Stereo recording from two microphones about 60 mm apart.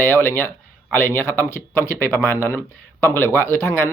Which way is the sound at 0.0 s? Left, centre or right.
Left.